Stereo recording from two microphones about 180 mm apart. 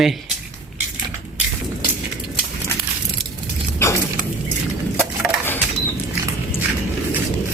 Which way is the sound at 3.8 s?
15° left (ahead or behind).